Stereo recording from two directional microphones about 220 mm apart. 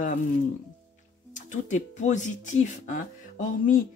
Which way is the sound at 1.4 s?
35° left (ahead or behind).